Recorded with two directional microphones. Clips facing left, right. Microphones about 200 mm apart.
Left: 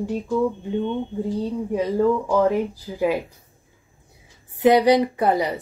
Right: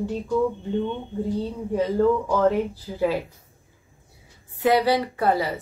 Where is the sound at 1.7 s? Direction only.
10° left (ahead or behind).